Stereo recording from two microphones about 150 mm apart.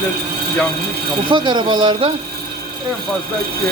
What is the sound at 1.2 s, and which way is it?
Speech, 30° right (ahead or behind).